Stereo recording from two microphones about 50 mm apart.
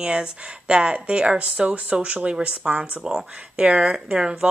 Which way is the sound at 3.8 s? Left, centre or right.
Centre.